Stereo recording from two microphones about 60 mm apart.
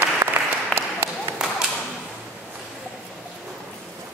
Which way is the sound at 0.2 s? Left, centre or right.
Right.